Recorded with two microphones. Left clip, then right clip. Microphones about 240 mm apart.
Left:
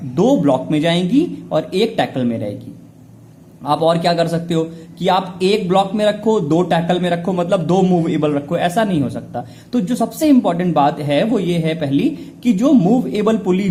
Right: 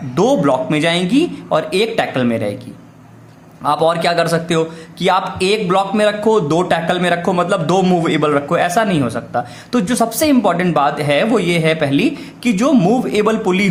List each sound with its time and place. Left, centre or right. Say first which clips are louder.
0.1 s a man's voice: right 1 dB; centre
3.8 s a man's voice: even; centre